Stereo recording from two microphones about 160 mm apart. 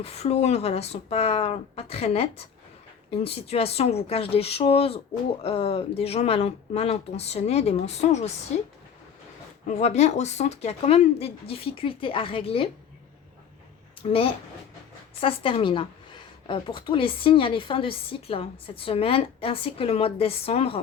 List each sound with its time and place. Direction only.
0.0 s speech: 40° left (ahead or behind)
9.6 s speech: 45° left (ahead or behind)
14.0 s speech: 35° left (ahead or behind)